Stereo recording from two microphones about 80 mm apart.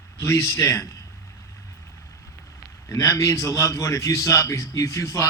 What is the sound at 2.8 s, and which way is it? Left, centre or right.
A man's voice, left.